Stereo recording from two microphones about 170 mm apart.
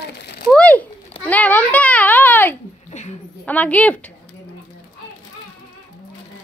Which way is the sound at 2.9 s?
40° left (ahead or behind).